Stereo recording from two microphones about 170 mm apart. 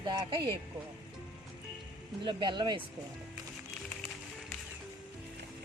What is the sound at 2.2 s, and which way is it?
Speech, 25° right (ahead or behind).